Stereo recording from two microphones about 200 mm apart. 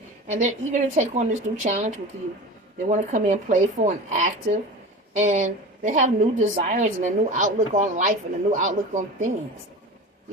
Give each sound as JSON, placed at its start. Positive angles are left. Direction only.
{"t": 0.3, "sound": "a woman's voice", "side_deg": -40}